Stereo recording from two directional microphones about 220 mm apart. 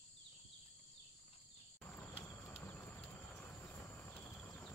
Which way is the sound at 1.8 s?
10° left (ahead or behind).